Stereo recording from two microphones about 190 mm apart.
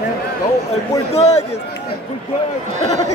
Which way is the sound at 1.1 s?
35° left (ahead or behind).